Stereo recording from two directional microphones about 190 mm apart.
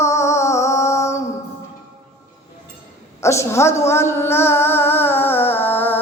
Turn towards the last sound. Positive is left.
turn(degrees=10)  # may be behind; listen again after turning